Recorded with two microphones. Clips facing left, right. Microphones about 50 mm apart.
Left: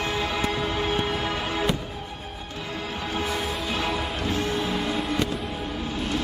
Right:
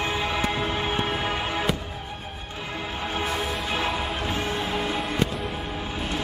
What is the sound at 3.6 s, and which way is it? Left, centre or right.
Music, centre.